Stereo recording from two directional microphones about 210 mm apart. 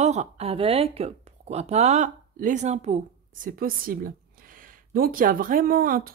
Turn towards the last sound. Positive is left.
turn(degrees=-45)  # may be behind; listen again after turning